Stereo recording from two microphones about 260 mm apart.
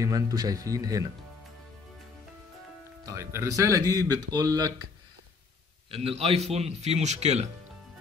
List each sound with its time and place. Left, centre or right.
0.0 s speech: centre
3.1 s speech: centre
5.9 s speech: right